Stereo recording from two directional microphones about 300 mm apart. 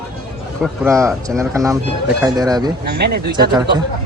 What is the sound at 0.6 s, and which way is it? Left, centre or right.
Speech, centre.